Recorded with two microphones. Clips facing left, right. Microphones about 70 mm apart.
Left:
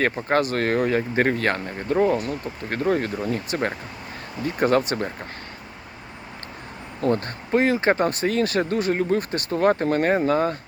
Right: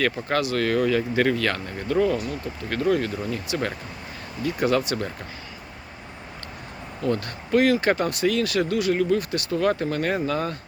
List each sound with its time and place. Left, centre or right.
0.0 s speech: left
7.0 s speech: left
7.5 s speech: left